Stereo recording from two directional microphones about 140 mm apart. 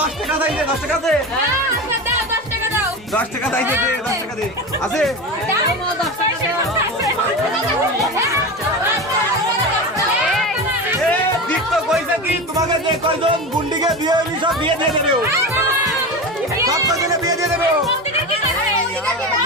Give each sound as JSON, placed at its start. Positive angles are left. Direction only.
{"t": 3.2, "sound": "speech", "side_deg": 10}
{"t": 13.8, "sound": "speech", "side_deg": -30}
{"t": 16.6, "sound": "speech", "side_deg": -25}